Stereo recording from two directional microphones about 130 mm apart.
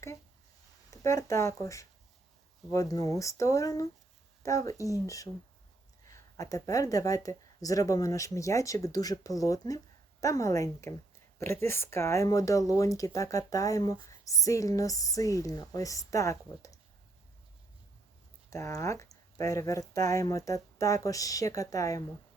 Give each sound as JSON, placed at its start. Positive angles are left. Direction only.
{"t": 0.9, "sound": "speech", "side_deg": 25}
{"t": 18.5, "sound": "speech", "side_deg": 25}